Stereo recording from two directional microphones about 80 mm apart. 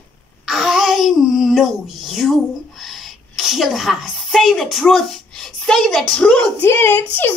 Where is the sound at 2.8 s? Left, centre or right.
Centre.